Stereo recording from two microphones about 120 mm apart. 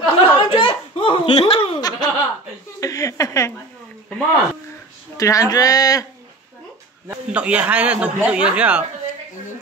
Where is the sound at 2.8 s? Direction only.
30° left (ahead or behind).